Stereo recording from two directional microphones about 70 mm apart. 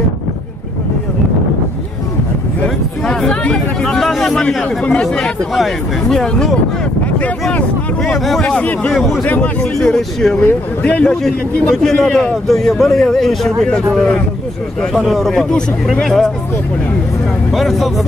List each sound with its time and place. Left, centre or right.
2.6 s a man's voice: centre
7.5 s speech: centre
9.8 s speech: centre
10.4 s speech: centre
11.2 s a man's voice: centre
17.5 s a man's voice: centre